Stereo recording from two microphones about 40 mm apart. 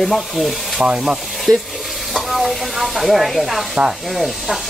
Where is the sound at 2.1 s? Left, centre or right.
Centre.